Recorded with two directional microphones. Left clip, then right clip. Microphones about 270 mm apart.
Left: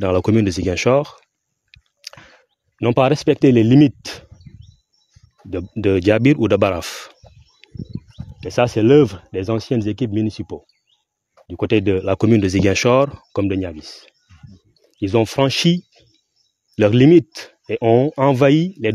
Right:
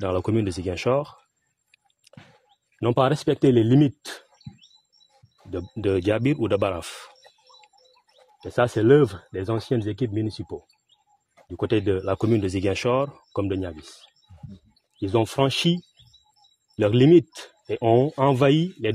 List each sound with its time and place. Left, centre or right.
0.0 s speech: left
2.8 s speech: left
5.5 s speech: left
8.4 s speech: left